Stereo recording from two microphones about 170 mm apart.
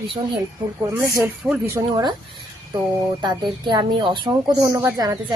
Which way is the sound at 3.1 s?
25° right (ahead or behind).